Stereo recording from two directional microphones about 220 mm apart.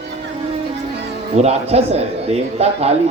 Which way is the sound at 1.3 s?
30° right (ahead or behind).